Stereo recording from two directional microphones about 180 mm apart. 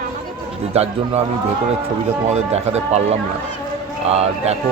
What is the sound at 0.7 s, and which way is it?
Speech, 35° right (ahead or behind).